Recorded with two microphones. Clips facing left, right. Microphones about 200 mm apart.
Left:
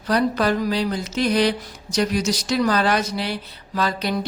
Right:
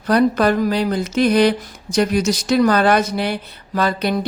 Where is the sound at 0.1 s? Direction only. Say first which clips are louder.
Right 5 dB; 55° right (ahead or behind).